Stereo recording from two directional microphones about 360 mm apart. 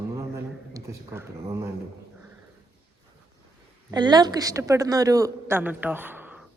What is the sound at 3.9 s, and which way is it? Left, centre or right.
A woman's voice, centre.